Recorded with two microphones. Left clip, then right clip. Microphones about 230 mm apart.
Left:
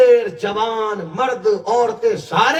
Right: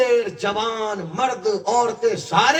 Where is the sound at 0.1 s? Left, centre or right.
Centre.